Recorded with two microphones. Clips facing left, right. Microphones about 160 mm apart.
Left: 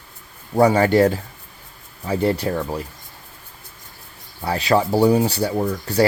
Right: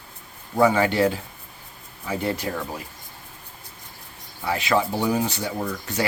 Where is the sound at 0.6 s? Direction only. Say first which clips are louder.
Left 4 dB; 40° left (ahead or behind).